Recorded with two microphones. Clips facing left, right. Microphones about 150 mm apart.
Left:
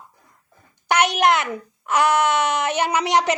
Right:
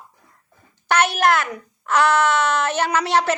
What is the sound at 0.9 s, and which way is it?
A child's voice, 15° left (ahead or behind).